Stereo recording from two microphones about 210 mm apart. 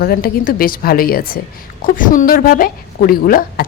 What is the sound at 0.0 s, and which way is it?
Speech, 45° left (ahead or behind).